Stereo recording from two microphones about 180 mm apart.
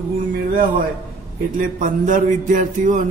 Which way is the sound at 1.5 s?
50° right (ahead or behind).